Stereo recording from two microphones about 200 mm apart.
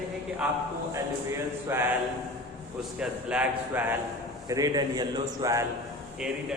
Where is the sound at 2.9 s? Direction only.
5° right (ahead or behind).